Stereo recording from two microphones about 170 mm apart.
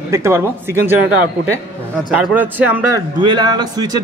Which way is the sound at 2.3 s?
15° right (ahead or behind).